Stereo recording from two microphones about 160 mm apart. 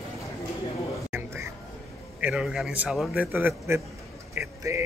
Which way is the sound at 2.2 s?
5° right (ahead or behind).